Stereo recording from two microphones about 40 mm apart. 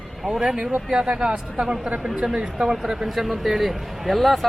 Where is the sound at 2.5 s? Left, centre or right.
Centre.